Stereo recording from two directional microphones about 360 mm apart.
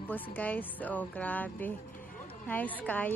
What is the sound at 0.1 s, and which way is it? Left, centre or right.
A woman's voice, centre.